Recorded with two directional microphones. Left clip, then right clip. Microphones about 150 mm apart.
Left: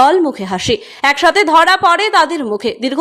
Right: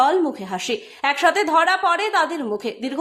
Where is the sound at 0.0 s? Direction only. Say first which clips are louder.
Left 7 dB; 35° left (ahead or behind).